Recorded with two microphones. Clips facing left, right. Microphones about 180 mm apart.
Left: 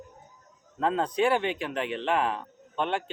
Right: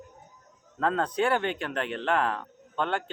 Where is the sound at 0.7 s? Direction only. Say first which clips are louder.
Left 1 dB; 20° left (ahead or behind).